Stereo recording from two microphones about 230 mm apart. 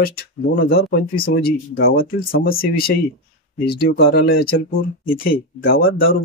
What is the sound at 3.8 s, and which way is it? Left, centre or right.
Speech, left.